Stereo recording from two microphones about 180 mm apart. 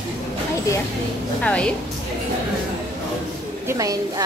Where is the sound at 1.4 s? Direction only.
5° left (ahead or behind).